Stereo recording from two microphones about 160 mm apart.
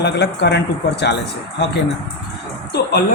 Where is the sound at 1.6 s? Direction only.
90° left.